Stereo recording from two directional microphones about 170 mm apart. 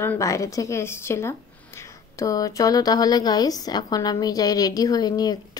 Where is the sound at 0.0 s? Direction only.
15° left (ahead or behind).